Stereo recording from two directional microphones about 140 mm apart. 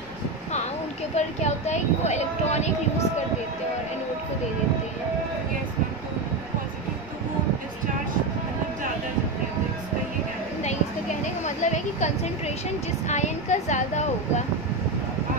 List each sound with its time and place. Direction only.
1.1 s speech: 55° left (ahead or behind)
11.4 s a sound: 55° left (ahead or behind)
13.0 s a woman's voice: 55° left (ahead or behind)